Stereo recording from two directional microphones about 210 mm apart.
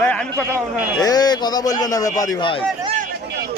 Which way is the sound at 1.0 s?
20° left (ahead or behind).